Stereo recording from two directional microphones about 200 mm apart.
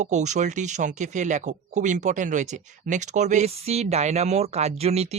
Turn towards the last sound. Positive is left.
turn(degrees=-30)  # may be behind; listen again after turning